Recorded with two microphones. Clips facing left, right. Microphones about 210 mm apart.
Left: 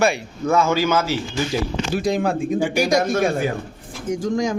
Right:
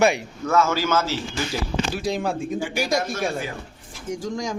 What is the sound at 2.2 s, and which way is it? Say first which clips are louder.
Speech: left 5 dB; 55° left (ahead or behind).